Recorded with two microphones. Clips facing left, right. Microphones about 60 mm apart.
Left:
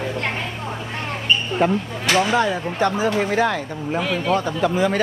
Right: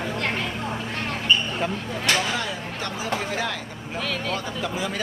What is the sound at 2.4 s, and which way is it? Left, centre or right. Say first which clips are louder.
Speech: left 10 dB; left.